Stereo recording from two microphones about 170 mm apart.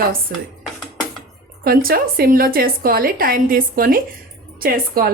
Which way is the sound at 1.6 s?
60° right (ahead or behind).